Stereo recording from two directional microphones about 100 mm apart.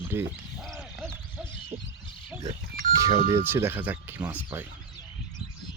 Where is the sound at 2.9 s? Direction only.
35° right (ahead or behind).